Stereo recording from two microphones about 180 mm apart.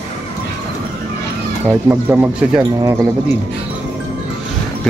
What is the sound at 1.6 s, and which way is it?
Speech, 15° right (ahead or behind).